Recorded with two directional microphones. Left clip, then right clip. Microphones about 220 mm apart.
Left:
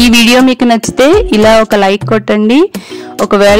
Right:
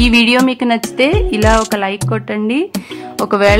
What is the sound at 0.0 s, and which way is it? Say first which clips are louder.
Speech: left 5 dB; 35° left (ahead or behind).